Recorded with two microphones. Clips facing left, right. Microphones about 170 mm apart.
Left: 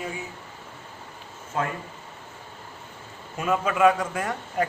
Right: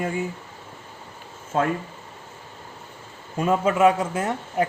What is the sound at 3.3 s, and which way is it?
A man's voice, 30° right (ahead or behind).